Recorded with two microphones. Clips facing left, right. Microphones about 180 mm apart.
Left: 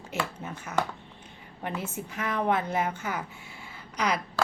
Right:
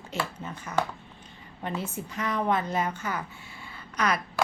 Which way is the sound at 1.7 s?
30° right (ahead or behind).